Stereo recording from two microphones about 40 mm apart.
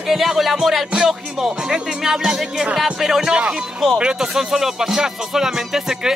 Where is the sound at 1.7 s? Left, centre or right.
Centre.